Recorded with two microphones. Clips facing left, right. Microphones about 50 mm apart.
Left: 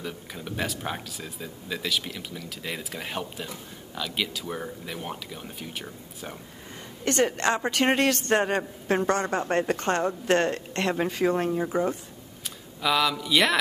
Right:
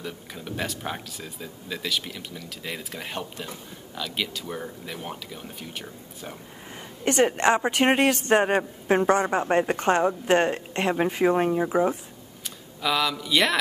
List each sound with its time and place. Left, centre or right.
0.0 s speech: centre
7.1 s a woman's voice: centre
12.8 s speech: centre